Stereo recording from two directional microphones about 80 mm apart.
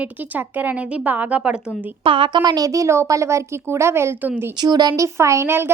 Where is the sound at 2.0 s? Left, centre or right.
Right.